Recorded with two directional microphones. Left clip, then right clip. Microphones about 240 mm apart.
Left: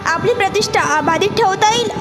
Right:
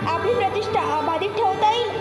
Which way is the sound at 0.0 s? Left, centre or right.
Left.